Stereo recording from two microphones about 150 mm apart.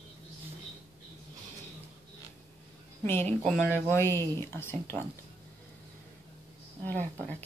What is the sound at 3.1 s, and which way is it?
Speech, 15° left (ahead or behind).